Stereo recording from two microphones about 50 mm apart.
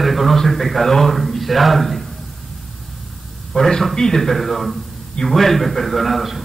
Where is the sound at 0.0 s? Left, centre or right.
Centre.